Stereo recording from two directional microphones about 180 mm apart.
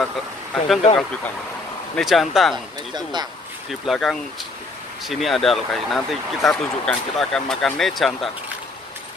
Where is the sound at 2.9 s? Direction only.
25° right (ahead or behind).